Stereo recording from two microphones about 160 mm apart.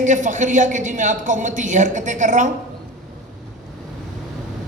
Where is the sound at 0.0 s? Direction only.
50° right (ahead or behind).